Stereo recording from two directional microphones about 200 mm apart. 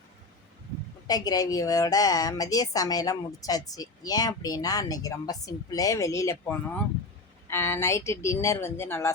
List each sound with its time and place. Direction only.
1.0 s a woman's voice: 20° left (ahead or behind)